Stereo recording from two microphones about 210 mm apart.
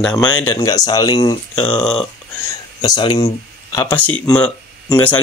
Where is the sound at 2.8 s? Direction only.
20° left (ahead or behind).